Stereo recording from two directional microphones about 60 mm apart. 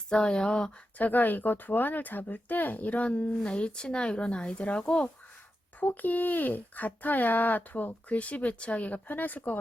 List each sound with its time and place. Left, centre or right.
0.1 s speech: centre
0.9 s speech: left
5.8 s speech: left